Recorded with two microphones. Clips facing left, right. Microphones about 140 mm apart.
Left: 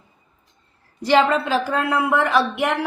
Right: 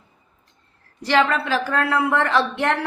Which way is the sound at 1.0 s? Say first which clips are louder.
Left 2 dB; 20° left (ahead or behind).